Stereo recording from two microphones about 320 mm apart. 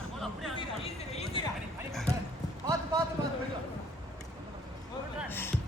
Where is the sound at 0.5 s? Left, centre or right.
Centre.